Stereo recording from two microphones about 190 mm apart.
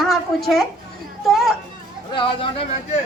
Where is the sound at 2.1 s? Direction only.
25° left (ahead or behind).